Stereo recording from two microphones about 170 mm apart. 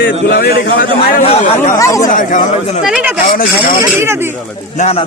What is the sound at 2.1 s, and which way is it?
Speech, 50° left (ahead or behind).